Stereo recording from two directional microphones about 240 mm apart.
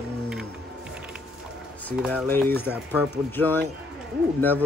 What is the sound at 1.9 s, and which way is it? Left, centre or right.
A man's voice, centre.